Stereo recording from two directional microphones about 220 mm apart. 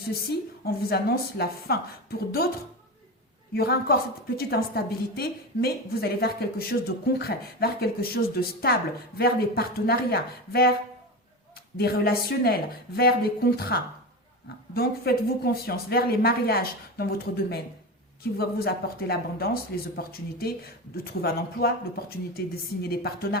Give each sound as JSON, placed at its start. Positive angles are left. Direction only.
{"t": 0.3, "sound": "a woman's voice", "side_deg": 45}
{"t": 3.5, "sound": "a woman's voice", "side_deg": 45}
{"t": 11.8, "sound": "a woman's voice", "side_deg": 45}